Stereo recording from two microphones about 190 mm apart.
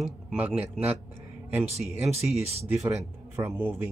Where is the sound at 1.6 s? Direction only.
35° right (ahead or behind).